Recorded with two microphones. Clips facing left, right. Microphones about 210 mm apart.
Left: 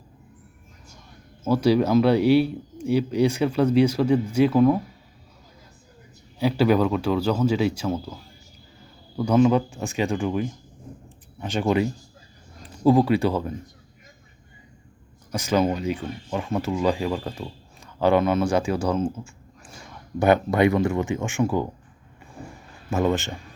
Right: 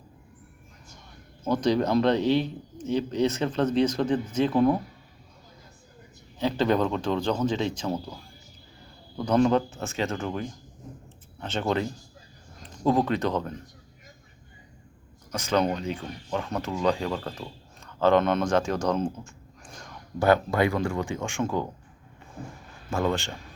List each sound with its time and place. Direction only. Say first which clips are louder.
1.5 s speech: left 4 dB; 10° left (ahead or behind)
6.4 s speech: left 4 dB; 10° left (ahead or behind)
9.1 s speech: left 3 dB; 5° left (ahead or behind)
15.3 s speech: left 3 dB; 10° left (ahead or behind)
20.1 s speech: left 3 dB; 20° left (ahead or behind)
22.9 s speech: left 4 dB; 20° left (ahead or behind)